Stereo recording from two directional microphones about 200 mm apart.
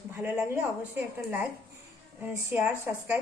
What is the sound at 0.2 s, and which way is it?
A woman's voice, 10° right (ahead or behind).